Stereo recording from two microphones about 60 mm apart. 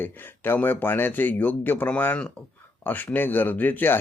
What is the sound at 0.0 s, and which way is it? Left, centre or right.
Speech, left.